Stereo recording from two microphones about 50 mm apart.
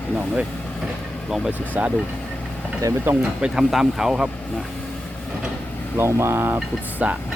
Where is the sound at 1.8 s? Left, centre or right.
Right.